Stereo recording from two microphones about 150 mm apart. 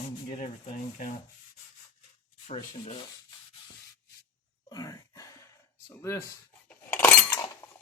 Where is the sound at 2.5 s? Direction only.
40° left (ahead or behind).